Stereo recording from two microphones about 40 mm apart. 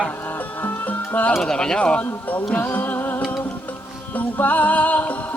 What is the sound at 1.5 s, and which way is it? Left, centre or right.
Speech, centre.